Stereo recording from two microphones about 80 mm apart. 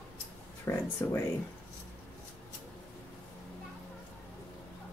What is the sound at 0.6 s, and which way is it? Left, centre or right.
Speech, left.